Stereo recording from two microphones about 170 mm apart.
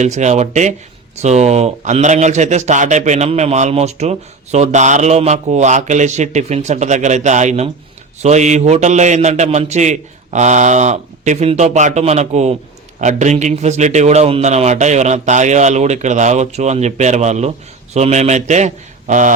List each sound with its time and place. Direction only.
0.0 s a man's voice: 45° right (ahead or behind)